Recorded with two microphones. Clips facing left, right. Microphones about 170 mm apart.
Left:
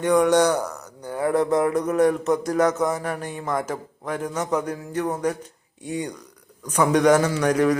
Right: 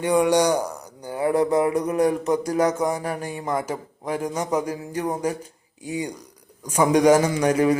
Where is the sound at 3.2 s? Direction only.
10° right (ahead or behind).